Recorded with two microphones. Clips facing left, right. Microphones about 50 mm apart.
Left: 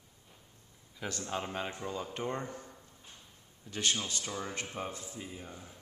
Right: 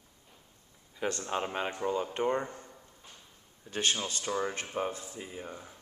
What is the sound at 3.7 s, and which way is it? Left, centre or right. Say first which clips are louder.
Speech: right 2 dB; right.